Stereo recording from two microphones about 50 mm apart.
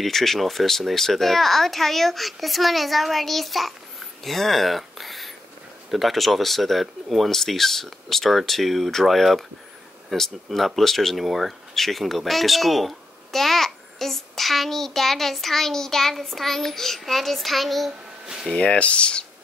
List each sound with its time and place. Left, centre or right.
0.0 s speech: centre
18.2 s a sound: centre
18.5 s speech: centre